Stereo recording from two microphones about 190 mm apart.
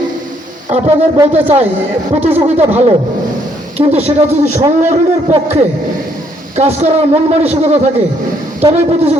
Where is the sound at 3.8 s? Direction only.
30° right (ahead or behind).